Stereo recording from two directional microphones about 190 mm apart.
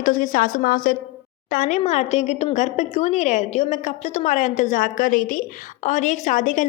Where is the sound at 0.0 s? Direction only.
45° left (ahead or behind).